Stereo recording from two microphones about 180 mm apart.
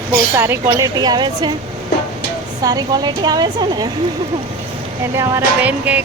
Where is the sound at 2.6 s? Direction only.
20° right (ahead or behind).